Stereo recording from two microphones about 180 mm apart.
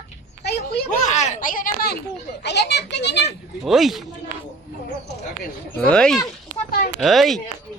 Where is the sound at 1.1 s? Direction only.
40° left (ahead or behind).